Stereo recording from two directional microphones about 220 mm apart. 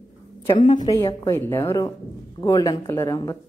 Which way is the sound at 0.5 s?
20° left (ahead or behind).